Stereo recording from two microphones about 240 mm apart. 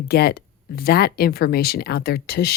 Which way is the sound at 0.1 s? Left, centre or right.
Left.